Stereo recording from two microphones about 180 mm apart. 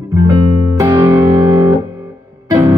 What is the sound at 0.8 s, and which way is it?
Music, 15° right (ahead or behind).